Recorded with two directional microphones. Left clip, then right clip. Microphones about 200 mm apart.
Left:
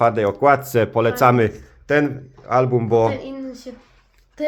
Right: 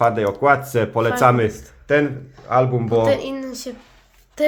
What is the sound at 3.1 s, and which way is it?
Speech, 50° right (ahead or behind).